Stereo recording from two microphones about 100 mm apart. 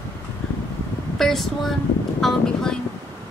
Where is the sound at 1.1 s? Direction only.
5° left (ahead or behind).